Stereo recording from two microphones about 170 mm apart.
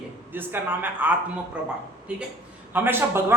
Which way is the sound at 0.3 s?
10° right (ahead or behind).